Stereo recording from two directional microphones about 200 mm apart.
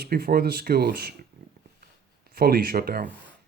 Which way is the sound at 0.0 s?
50° right (ahead or behind).